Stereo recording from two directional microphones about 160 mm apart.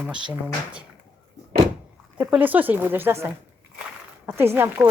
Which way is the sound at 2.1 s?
10° right (ahead or behind).